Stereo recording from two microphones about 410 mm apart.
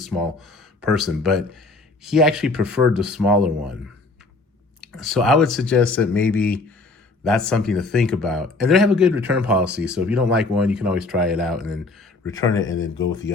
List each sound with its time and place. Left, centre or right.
0.0 s speech: centre
4.9 s speech: centre
12.6 s speech: left